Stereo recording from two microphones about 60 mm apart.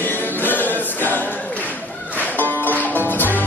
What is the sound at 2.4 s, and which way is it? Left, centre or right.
Music, left.